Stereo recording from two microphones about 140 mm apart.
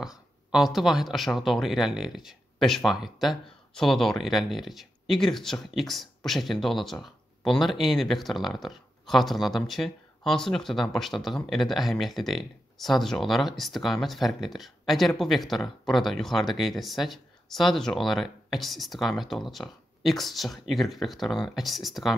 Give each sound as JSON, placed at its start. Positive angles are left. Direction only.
{"t": 0.0, "sound": "speech", "side_deg": -5}